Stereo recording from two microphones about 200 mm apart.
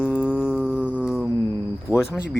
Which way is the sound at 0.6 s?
5° right (ahead or behind).